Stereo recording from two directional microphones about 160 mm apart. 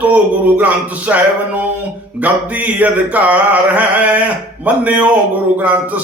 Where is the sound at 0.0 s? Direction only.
10° right (ahead or behind).